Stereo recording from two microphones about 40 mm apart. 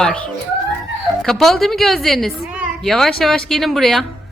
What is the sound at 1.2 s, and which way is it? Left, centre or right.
Speech, centre.